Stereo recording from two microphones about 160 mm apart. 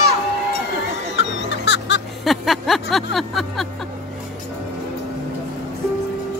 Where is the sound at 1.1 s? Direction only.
90° left.